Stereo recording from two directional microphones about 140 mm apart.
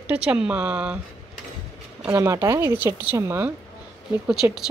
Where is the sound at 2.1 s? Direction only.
20° right (ahead or behind).